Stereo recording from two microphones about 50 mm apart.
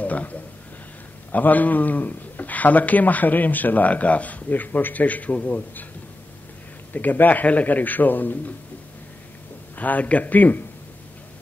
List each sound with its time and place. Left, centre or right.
0.0 s speech: left
6.9 s speech: left
9.8 s speech: left